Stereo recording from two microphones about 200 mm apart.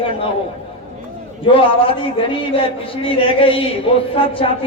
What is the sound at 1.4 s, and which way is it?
A man's voice, 25° left (ahead or behind).